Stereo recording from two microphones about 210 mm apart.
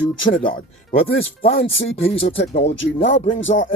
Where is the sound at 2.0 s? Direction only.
30° left (ahead or behind).